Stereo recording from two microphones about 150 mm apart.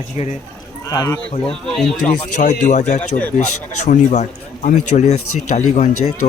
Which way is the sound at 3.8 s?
50° left (ahead or behind).